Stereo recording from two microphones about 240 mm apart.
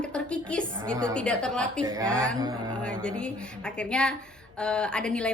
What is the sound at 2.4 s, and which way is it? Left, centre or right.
Speech, centre.